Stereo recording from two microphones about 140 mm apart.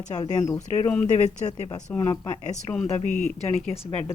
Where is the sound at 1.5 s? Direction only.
30° left (ahead or behind).